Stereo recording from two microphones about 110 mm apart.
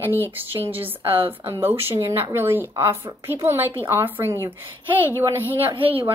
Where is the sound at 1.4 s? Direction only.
20° right (ahead or behind).